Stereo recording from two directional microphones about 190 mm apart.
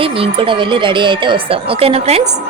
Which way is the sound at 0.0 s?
30° right (ahead or behind).